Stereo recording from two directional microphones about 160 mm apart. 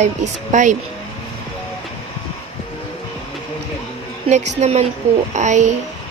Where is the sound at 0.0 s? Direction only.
50° right (ahead or behind).